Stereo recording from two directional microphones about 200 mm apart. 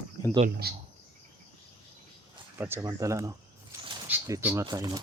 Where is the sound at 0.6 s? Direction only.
50° right (ahead or behind).